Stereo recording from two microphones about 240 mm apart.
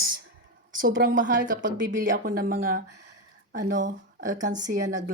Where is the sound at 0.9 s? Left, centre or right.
Right.